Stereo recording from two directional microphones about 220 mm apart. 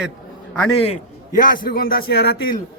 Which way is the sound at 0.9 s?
40° left (ahead or behind).